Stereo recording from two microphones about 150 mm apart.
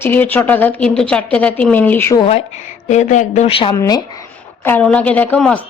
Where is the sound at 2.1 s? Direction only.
40° left (ahead or behind).